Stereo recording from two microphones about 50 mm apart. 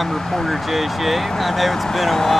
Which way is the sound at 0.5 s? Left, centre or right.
Centre.